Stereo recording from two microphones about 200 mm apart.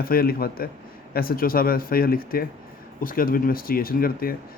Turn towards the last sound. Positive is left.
turn(degrees=45)  # may be behind; listen again after turning